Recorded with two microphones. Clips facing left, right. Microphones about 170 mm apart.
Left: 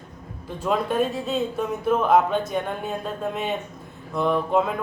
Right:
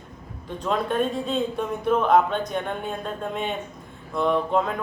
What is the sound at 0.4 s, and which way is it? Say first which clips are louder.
A man's voice: left 1 dB; 5° left (ahead or behind).